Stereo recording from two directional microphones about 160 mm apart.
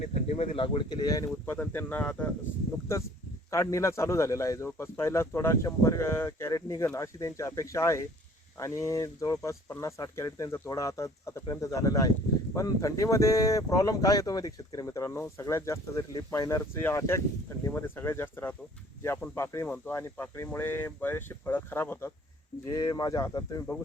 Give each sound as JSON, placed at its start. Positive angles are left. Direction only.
{"t": 0.0, "sound": "speech", "side_deg": 40}
{"t": 3.5, "sound": "a man's voice", "side_deg": 20}